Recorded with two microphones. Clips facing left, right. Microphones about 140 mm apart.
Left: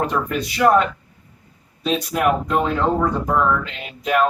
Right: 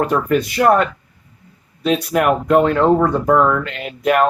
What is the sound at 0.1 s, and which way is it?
Speech, 55° right (ahead or behind).